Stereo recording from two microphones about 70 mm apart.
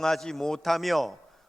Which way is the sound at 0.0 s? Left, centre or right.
Centre.